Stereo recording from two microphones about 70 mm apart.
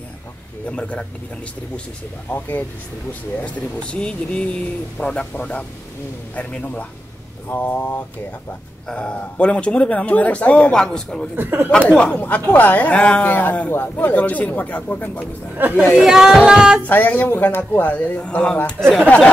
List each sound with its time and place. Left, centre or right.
0.7 s speech: centre
2.3 s speech: left
7.4 s speech: left
8.8 s speech: centre
11.3 s speech: right
11.9 s speech: centre
15.5 s speech: right
16.0 s music: centre
16.8 s speech: left